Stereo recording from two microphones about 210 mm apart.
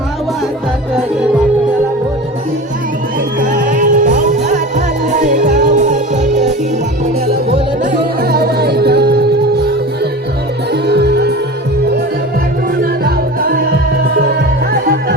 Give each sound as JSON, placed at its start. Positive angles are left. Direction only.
{"t": 3.4, "sound": "music", "side_deg": -40}
{"t": 7.9, "sound": "music", "side_deg": -50}
{"t": 12.8, "sound": "music", "side_deg": -45}